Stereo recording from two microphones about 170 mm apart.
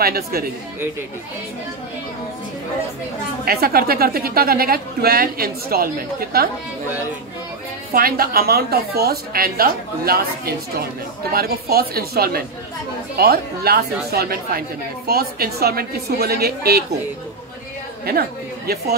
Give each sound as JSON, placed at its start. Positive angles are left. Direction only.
{"t": 0.0, "sound": "a woman's voice", "side_deg": -65}
{"t": 3.4, "sound": "a woman's voice", "side_deg": -65}
{"t": 7.9, "sound": "a woman's voice", "side_deg": -60}